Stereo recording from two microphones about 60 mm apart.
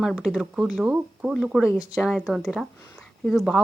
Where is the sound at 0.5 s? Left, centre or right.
Centre.